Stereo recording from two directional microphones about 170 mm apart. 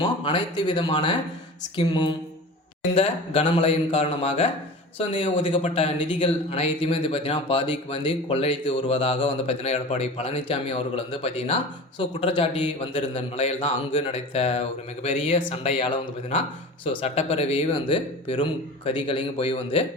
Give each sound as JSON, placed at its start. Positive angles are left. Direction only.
{"t": 0.0, "sound": "speech", "side_deg": 25}